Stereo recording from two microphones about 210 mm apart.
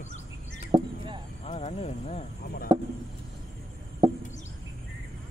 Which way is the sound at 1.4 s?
30° left (ahead or behind).